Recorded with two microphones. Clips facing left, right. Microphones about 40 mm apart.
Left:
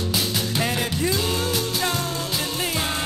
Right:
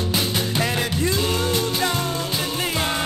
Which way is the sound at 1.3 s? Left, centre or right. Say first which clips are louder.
Right 2 dB; centre.